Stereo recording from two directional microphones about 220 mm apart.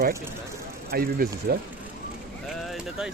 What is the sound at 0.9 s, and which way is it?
Speech, 45° right (ahead or behind).